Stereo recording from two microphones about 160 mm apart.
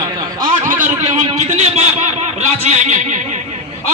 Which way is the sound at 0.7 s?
50° right (ahead or behind).